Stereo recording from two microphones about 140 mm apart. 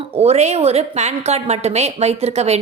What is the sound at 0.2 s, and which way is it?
A woman's voice, 50° right (ahead or behind).